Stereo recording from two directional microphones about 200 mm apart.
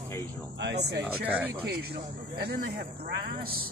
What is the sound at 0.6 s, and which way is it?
Speech, 60° right (ahead or behind).